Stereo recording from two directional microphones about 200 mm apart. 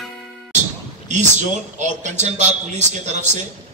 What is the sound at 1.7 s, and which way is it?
A man's voice, 35° right (ahead or behind).